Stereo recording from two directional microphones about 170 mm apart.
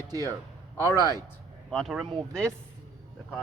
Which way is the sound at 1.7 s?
Centre (ahead or behind).